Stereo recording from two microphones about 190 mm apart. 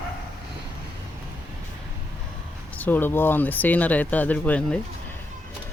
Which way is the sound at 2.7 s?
10° left (ahead or behind).